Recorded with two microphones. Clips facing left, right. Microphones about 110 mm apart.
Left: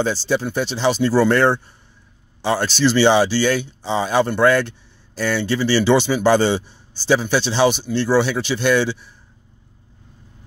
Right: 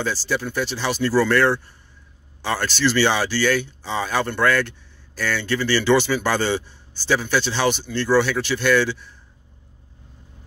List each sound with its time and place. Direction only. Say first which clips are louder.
0.0 s speech: left 5 dB; 20° left (ahead or behind)